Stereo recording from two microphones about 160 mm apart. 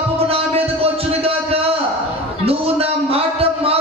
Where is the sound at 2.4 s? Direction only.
35° right (ahead or behind).